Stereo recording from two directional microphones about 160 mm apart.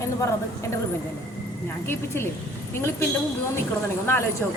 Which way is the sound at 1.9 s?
15° left (ahead or behind).